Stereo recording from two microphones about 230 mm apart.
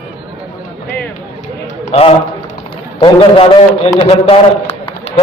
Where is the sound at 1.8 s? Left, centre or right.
Left.